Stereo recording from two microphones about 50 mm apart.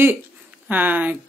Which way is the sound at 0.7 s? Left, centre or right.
Right.